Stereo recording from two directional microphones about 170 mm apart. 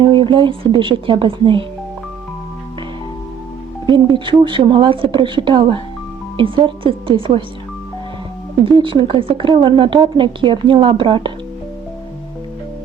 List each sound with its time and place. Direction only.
0.0 s a woman's voice: 30° right (ahead or behind)
3.8 s a woman's voice: 30° right (ahead or behind)
8.6 s a woman's voice: 30° right (ahead or behind)